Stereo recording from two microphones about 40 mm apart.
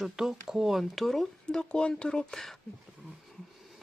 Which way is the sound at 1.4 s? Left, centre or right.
Left.